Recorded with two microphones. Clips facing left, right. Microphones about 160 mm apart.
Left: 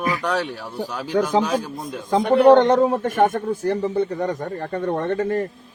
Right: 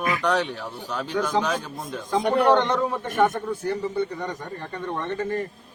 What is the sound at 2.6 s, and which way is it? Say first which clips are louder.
Speech: left 7 dB; 40° left (ahead or behind).